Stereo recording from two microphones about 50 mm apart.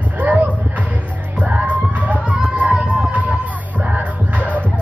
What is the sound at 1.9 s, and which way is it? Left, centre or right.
Crowd, right.